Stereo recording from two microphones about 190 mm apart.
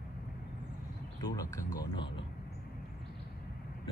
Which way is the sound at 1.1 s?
20° left (ahead or behind).